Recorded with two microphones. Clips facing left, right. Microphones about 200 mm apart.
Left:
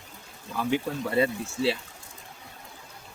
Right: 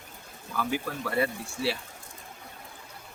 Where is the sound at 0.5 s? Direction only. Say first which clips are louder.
Left 4 dB; 25° left (ahead or behind).